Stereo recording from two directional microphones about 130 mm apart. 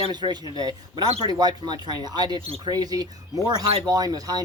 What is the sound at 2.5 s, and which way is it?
Speech, 50° right (ahead or behind).